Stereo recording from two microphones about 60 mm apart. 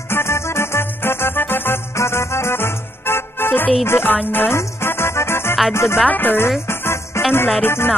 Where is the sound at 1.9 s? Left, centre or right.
Left.